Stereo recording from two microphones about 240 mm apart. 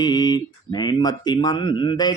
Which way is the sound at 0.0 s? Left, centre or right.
Centre.